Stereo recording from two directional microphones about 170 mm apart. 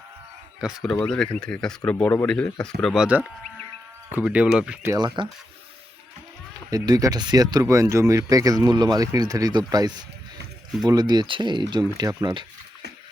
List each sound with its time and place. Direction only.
0.6 s speech: centre (ahead or behind)
4.9 s speech: 25° right (ahead or behind)
6.7 s speech: 20° right (ahead or behind)